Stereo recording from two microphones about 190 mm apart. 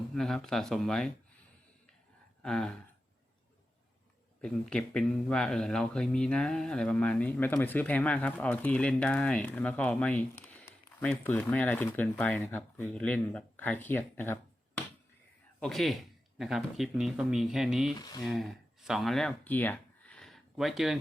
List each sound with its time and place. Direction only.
0.1 s speech: centre (ahead or behind)
2.4 s a sound: 5° left (ahead or behind)
4.4 s speech: 5° left (ahead or behind)
15.6 s speech: centre (ahead or behind)
17.9 s speech: 20° left (ahead or behind)
18.2 s speech: centre (ahead or behind)